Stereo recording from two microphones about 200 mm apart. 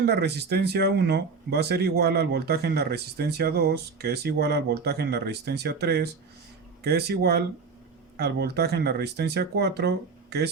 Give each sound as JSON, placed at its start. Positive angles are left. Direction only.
{"t": 0.0, "sound": "speech", "side_deg": -55}